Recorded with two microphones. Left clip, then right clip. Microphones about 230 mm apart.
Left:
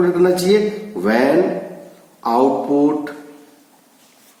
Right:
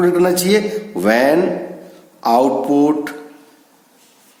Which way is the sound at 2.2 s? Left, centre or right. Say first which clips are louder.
Right 2 dB; right.